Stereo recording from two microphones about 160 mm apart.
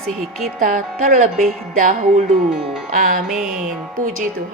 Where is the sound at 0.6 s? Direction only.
55° right (ahead or behind).